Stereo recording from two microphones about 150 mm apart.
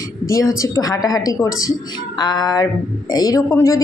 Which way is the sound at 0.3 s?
20° left (ahead or behind).